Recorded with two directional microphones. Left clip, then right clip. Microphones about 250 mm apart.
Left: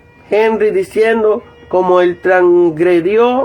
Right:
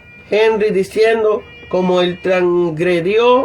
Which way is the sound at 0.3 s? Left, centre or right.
Left.